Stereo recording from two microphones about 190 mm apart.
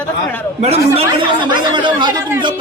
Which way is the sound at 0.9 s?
25° right (ahead or behind).